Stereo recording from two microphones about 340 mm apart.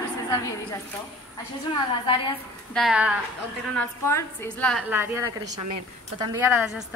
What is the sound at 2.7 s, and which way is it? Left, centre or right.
A woman's voice, centre.